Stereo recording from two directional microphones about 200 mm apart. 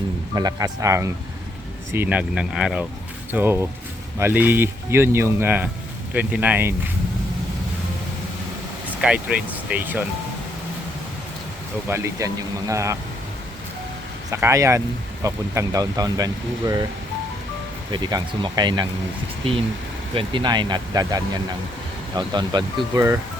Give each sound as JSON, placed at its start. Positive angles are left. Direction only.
{"t": 0.3, "sound": "speech", "side_deg": -20}
{"t": 9.0, "sound": "speech", "side_deg": -5}
{"t": 11.9, "sound": "speech", "side_deg": -15}
{"t": 14.3, "sound": "speech", "side_deg": -15}
{"t": 17.9, "sound": "speech", "side_deg": -20}